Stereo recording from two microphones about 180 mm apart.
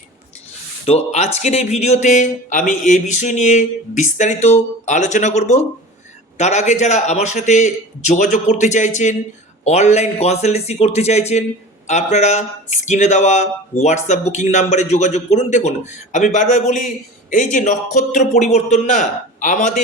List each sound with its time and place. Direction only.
0.9 s a man's voice: 35° left (ahead or behind)